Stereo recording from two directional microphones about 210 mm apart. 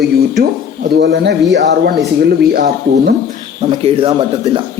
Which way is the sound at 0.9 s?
55° right (ahead or behind).